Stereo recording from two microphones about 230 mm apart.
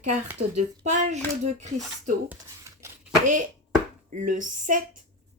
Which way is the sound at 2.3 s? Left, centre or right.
Centre.